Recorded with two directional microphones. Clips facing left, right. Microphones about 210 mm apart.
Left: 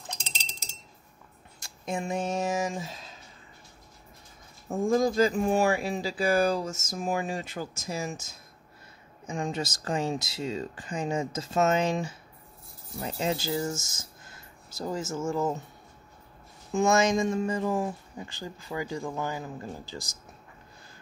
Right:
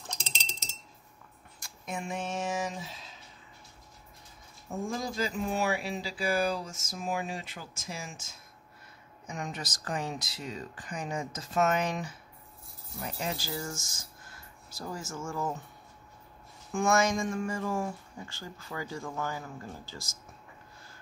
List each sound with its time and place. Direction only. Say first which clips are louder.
1.6 s speech: left 5 dB; 35° left (ahead or behind)
4.6 s speech: left 10 dB; 45° left (ahead or behind)
9.2 s speech: left 7 dB; 25° left (ahead or behind)
16.7 s speech: left 4 dB; 20° left (ahead or behind)